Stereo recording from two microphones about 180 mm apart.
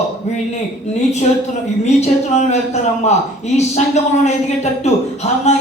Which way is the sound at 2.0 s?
40° left (ahead or behind).